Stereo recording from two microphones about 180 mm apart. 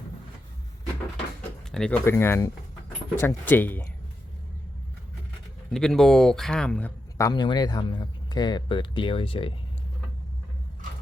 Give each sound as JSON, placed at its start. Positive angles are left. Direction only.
{"t": 1.7, "sound": "speech", "side_deg": 5}
{"t": 5.7, "sound": "speech", "side_deg": 0}
{"t": 7.2, "sound": "speech", "side_deg": 20}